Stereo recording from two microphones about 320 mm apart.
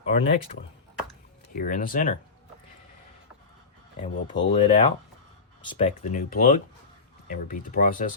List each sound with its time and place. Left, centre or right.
0.1 s speech: left
1.5 s speech: left
4.4 s speech: centre